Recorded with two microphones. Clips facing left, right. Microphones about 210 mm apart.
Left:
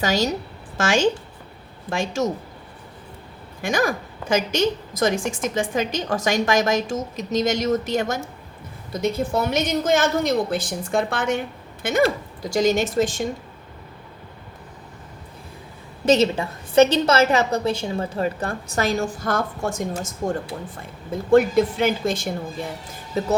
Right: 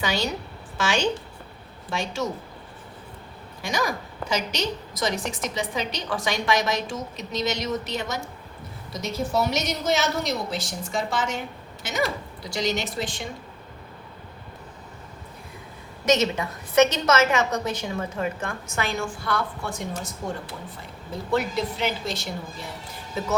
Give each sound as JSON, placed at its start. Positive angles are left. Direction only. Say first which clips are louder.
{"t": 0.0, "sound": "a woman's voice", "louder": "left 5 dB", "side_deg": 45}
{"t": 3.6, "sound": "a woman's voice", "louder": "left 5 dB", "side_deg": 50}
{"t": 16.0, "sound": "a woman's voice", "louder": "left 4 dB", "side_deg": 30}